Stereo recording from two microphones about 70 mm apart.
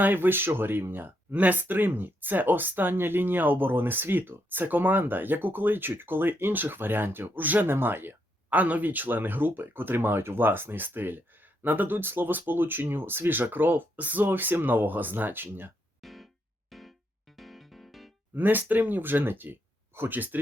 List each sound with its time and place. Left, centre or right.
0.0 s speech: right
16.0 s music: centre
18.3 s speech: right